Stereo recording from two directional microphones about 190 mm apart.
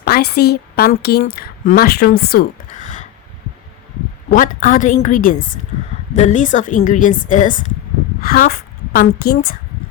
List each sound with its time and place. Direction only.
0.0 s a woman's voice: 55° left (ahead or behind)
4.3 s a woman's voice: 45° left (ahead or behind)